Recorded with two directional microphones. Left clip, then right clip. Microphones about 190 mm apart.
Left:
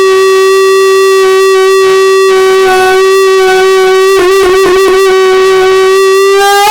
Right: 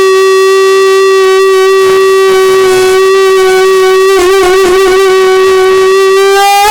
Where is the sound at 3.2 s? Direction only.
20° right (ahead or behind).